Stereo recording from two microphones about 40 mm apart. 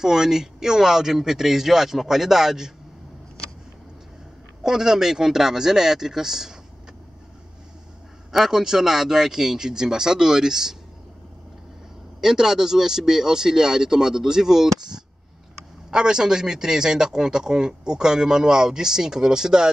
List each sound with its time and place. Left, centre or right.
0.0 s a man's voice: centre
4.6 s a man's voice: centre
8.3 s a man's voice: centre
12.2 s a man's voice: centre
15.9 s a man's voice: centre